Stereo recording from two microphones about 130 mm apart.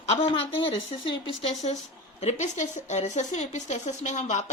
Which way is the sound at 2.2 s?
60° left (ahead or behind).